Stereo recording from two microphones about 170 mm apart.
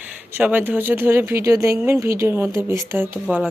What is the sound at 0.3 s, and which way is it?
Speech, 10° right (ahead or behind).